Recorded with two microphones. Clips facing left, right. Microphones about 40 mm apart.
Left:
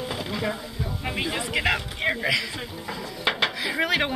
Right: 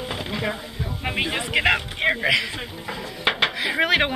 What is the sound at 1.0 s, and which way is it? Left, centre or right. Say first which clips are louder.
A man's voice: right 4 dB; right.